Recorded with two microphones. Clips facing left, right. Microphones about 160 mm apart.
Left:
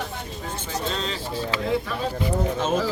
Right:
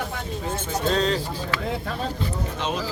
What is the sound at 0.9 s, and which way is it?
Speech, 45° right (ahead or behind).